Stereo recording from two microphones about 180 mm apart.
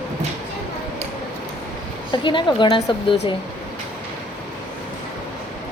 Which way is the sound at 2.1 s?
25° left (ahead or behind).